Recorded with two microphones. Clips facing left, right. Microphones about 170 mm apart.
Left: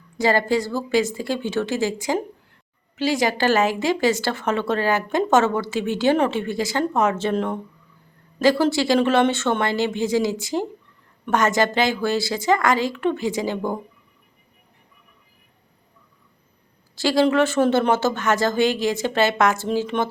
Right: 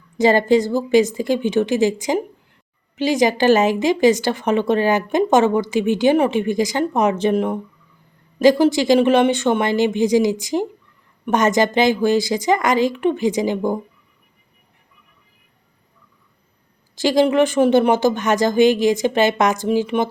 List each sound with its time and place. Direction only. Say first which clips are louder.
0.2 s a woman's voice: right 5 dB; 20° right (ahead or behind)
16.9 s a woman's voice: right 3 dB; 20° right (ahead or behind)